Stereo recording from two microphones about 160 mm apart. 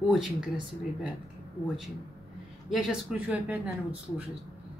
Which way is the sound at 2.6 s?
Centre (ahead or behind).